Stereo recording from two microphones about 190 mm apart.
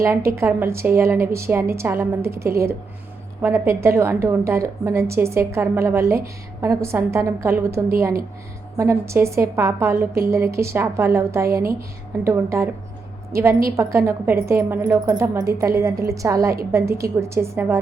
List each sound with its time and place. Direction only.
0.3 s a woman's voice: 15° right (ahead or behind)